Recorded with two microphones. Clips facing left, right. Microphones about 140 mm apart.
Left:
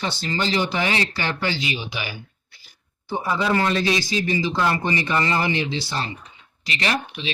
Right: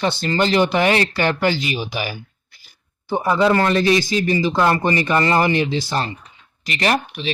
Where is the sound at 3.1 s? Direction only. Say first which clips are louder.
Right 6 dB; 55° right (ahead or behind).